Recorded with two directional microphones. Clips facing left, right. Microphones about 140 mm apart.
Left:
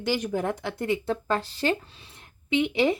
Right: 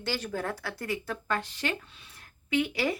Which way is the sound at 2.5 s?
20° left (ahead or behind).